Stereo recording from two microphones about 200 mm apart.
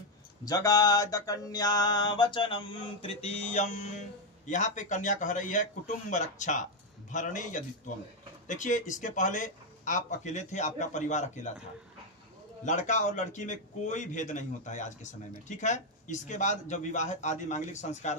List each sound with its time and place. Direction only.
0.5 s mantra: 20° left (ahead or behind); by 4.0 s 35° left (ahead or behind)
4.5 s a man's voice: 40° left (ahead or behind)
12.6 s a man's voice: 40° left (ahead or behind)